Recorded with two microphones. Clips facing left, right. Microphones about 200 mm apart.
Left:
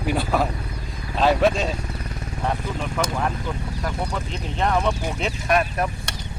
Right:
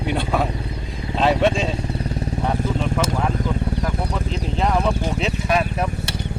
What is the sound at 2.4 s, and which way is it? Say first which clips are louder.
Vehicle: right 3 dB; centre (ahead or behind).